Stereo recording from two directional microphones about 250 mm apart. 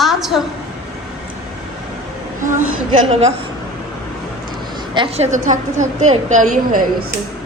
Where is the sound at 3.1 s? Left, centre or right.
Right.